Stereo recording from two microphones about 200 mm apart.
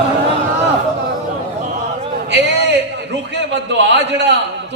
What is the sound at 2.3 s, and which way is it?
A man's voice, 60° right (ahead or behind).